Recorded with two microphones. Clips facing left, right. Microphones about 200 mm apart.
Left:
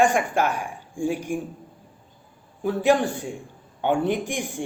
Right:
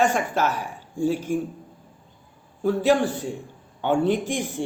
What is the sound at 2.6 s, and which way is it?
Speech, 15° left (ahead or behind).